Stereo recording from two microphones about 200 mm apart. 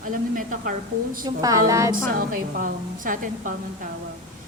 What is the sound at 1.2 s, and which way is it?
Speech, 15° right (ahead or behind).